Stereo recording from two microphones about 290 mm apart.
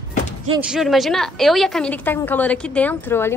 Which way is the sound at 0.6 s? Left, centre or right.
Centre.